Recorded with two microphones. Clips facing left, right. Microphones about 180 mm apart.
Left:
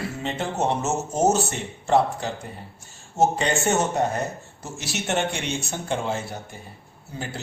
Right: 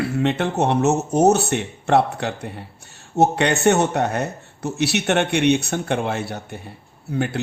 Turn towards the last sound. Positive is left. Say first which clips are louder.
# right 10 dB
turn(degrees=-65)  # may be behind; listen again after turning